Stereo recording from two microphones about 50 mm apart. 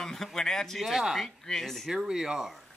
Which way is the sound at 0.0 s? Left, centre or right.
Centre.